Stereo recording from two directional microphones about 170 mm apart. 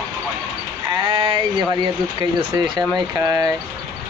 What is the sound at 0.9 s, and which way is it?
Speech, 25° right (ahead or behind).